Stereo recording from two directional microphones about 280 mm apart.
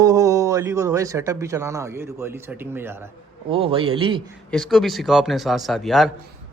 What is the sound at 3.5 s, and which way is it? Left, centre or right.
Speech, centre.